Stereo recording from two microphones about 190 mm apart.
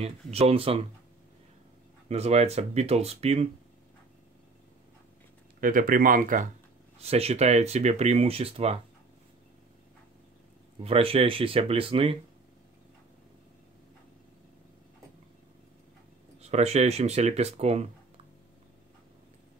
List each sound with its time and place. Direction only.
0.0 s speech: 30° right (ahead or behind)
2.0 s speech: 35° right (ahead or behind)
5.6 s speech: 45° right (ahead or behind)
7.0 s speech: 35° right (ahead or behind)
10.8 s speech: 30° right (ahead or behind)
16.3 s speech: 35° right (ahead or behind)